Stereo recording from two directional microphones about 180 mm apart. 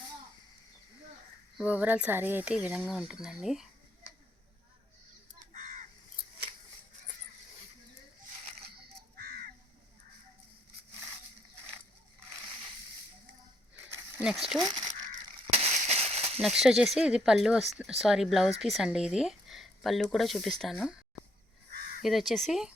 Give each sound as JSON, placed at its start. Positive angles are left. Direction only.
{"t": 1.5, "sound": "speech", "side_deg": -5}
{"t": 5.5, "sound": "crow", "side_deg": -40}
{"t": 9.2, "sound": "crow", "side_deg": -55}
{"t": 13.9, "sound": "a sound", "side_deg": -5}
{"t": 14.6, "sound": "speech", "side_deg": -25}
{"t": 15.4, "sound": "firecracker", "side_deg": -35}
{"t": 16.4, "sound": "speech", "side_deg": 0}
{"t": 22.0, "sound": "speech", "side_deg": 0}